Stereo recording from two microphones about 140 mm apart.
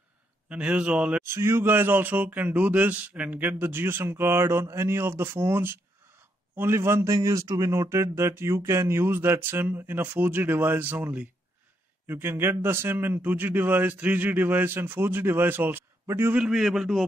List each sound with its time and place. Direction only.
0.5 s speech: 5° right (ahead or behind)